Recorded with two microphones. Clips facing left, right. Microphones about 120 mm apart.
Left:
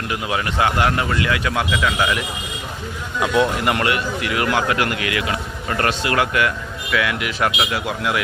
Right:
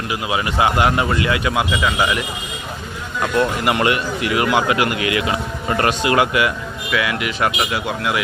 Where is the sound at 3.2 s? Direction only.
5° left (ahead or behind).